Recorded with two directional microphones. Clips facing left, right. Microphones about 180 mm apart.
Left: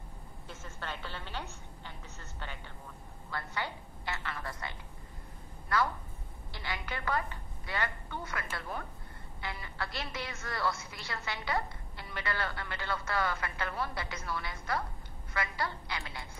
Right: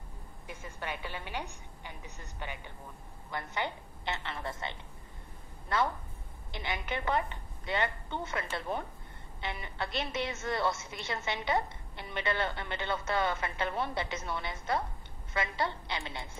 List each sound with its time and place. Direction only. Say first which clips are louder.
0.5 s a woman's voice: right 3 dB; 15° right (ahead or behind)